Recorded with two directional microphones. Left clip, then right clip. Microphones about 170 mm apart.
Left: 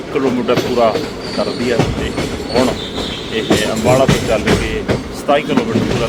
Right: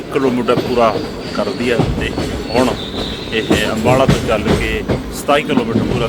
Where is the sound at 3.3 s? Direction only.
15° right (ahead or behind).